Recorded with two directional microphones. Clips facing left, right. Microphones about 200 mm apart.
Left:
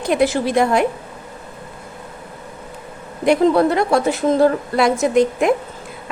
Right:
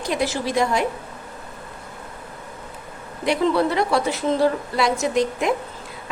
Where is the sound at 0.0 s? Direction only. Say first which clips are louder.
Left 7 dB; 55° left (ahead or behind).